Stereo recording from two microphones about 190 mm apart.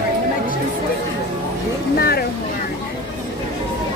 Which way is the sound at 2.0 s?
55° left (ahead or behind).